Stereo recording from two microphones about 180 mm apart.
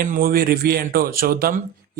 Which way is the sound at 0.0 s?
55° right (ahead or behind).